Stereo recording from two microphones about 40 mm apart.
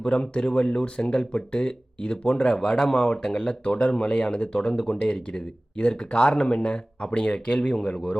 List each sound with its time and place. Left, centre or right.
0.0 s speech: left